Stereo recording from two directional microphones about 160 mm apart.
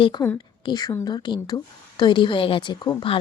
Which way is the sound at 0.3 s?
25° left (ahead or behind).